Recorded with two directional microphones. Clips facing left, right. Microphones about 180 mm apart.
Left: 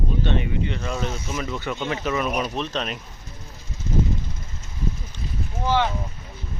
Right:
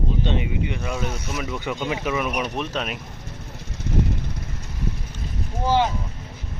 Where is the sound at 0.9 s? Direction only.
Centre (ahead or behind).